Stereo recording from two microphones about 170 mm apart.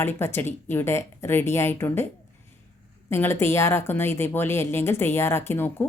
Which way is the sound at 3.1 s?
15° left (ahead or behind).